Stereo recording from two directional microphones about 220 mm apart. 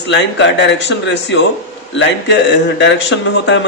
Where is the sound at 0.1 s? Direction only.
55° left (ahead or behind).